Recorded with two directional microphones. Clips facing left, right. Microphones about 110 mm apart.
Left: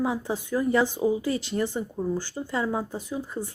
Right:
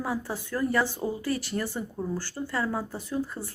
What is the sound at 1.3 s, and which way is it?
A woman's voice, 20° left (ahead or behind).